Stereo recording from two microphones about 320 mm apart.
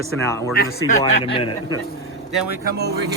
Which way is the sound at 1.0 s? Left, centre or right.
Centre.